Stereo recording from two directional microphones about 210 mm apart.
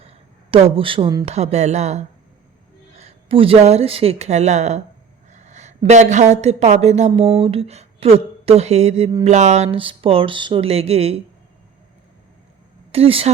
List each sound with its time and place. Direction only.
0.5 s speech: 25° right (ahead or behind)
7.3 s a sound: 30° right (ahead or behind)
9.2 s speech: 35° right (ahead or behind)
12.9 s speech: 25° right (ahead or behind)